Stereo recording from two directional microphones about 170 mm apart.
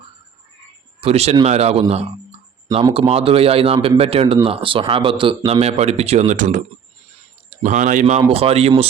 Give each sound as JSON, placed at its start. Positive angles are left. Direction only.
{"t": 1.0, "sound": "speech", "side_deg": -40}
{"t": 2.9, "sound": "speech", "side_deg": -35}
{"t": 7.6, "sound": "speech", "side_deg": -45}